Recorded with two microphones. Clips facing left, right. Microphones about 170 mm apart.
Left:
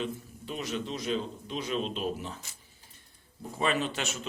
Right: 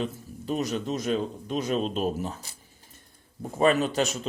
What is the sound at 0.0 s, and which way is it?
A man's voice, 40° right (ahead or behind).